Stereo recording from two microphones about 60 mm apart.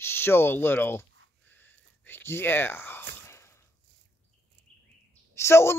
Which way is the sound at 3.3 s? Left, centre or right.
Left.